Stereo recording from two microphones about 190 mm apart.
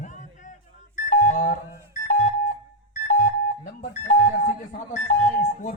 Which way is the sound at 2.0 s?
40° left (ahead or behind).